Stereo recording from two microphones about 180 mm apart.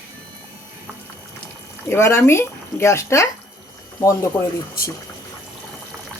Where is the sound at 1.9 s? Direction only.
15° left (ahead or behind).